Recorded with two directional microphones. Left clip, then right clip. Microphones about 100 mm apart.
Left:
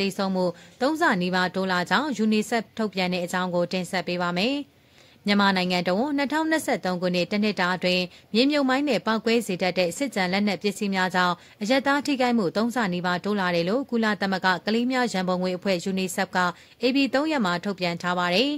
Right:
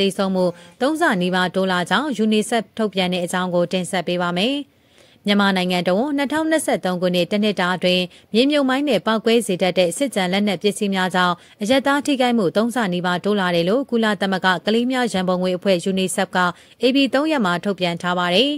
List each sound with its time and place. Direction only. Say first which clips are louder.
0.0 s a woman's voice: right 6 dB; 35° right (ahead or behind)